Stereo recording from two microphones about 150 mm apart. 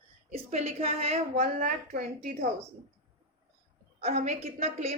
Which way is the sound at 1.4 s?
70° right (ahead or behind).